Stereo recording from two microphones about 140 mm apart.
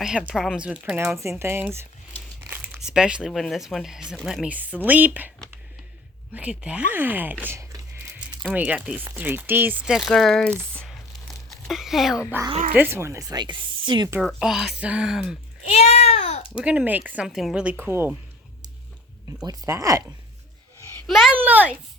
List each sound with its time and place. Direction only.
0.0 s speech: 5° right (ahead or behind)
6.3 s speech: 10° right (ahead or behind)
8.5 s speech: 10° right (ahead or behind)
12.7 s speech: 15° right (ahead or behind); by 14.1 s 35° right (ahead or behind)
14.2 s speech: centre (ahead or behind)
15.7 s babbling: 50° left (ahead or behind)
16.6 s speech: 10° right (ahead or behind)
19.5 s speech: 20° right (ahead or behind)
21.1 s speech: centre (ahead or behind)
21.3 s speech: 10° right (ahead or behind)